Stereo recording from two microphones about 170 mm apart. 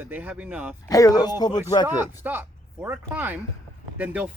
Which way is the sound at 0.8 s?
20° left (ahead or behind).